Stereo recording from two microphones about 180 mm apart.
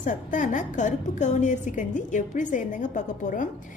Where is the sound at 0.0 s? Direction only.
45° left (ahead or behind).